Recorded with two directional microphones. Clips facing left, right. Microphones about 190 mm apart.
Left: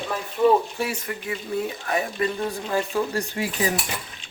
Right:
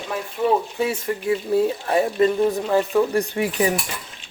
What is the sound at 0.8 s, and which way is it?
Speech, 25° right (ahead or behind).